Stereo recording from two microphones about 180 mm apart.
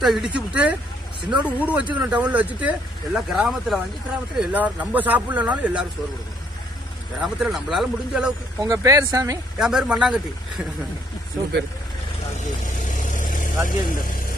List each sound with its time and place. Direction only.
0.0 s speech: centre (ahead or behind)
7.2 s speech: 5° right (ahead or behind)
8.5 s speech: 15° right (ahead or behind)
9.6 s speech: 5° right (ahead or behind)
12.4 s vehicle: 45° left (ahead or behind)
13.7 s speech: 50° left (ahead or behind)